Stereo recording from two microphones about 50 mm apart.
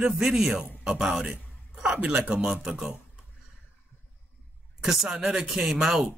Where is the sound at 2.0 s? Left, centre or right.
Right.